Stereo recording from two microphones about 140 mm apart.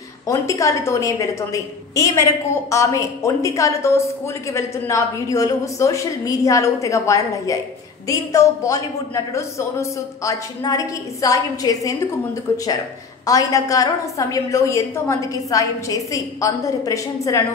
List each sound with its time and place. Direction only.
0.3 s a woman's voice: 20° left (ahead or behind)